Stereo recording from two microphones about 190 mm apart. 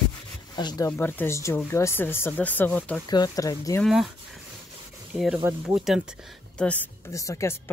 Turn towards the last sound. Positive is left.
turn(degrees=15)  # may be behind; listen again after turning